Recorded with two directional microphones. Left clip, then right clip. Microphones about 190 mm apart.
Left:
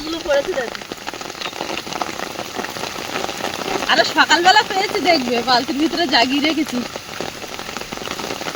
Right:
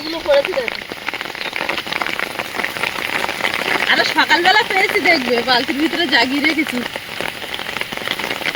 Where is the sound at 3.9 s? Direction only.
20° left (ahead or behind).